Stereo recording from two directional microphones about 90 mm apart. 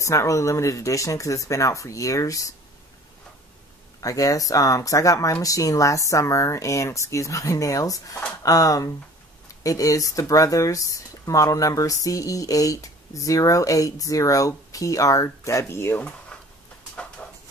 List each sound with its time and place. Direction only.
0.0 s speech: 35° left (ahead or behind)
4.0 s speech: 40° left (ahead or behind)
16.3 s a sound: 10° left (ahead or behind)